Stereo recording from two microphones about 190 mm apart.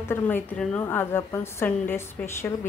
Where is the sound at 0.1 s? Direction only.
10° left (ahead or behind).